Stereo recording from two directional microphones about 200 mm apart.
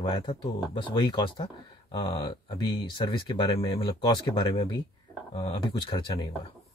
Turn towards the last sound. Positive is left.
turn(degrees=25)  # may be behind; listen again after turning